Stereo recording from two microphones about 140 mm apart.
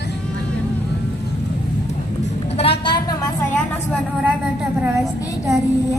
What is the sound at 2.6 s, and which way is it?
Vehicle, 40° left (ahead or behind).